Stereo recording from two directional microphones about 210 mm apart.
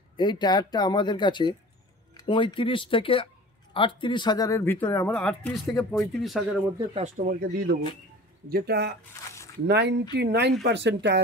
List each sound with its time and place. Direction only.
0.2 s speech: 20° left (ahead or behind); by 6.4 s centre (ahead or behind)
6.9 s speech: 30° right (ahead or behind)
7.2 s speech: 45° right (ahead or behind)
9.2 s a sound: 15° left (ahead or behind)
9.7 s speech: 55° right (ahead or behind)